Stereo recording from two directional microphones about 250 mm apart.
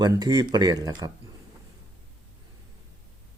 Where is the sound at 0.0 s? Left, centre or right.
Centre.